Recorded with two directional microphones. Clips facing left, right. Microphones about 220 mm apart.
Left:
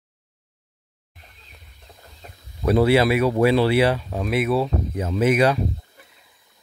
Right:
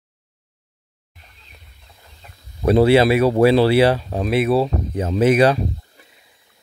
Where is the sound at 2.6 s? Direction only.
25° right (ahead or behind).